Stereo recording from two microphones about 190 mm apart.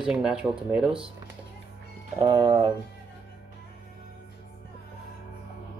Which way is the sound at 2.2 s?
25° right (ahead or behind).